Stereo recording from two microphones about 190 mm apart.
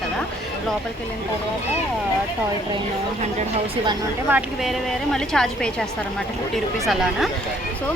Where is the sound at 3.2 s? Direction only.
30° right (ahead or behind).